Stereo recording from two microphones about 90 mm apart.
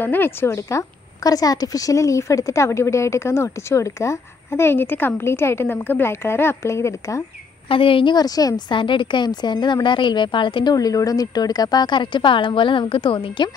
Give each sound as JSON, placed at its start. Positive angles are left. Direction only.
{"t": 0.0, "sound": "a woman's voice", "side_deg": 20}
{"t": 7.6, "sound": "a woman's voice", "side_deg": 80}
{"t": 8.2, "sound": "a woman's voice", "side_deg": 45}